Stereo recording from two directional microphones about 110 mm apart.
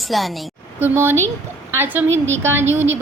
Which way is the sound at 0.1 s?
Centre (ahead or behind).